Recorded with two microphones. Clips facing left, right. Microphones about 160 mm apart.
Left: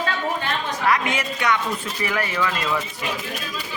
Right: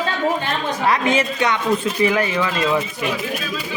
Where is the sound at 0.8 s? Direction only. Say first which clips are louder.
Right 4 dB; 25° right (ahead or behind).